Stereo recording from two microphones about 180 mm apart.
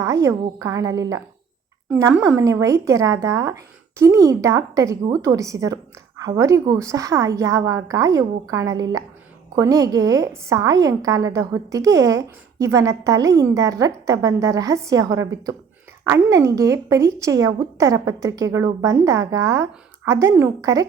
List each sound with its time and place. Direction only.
0.0 s a woman's voice: 20° right (ahead or behind)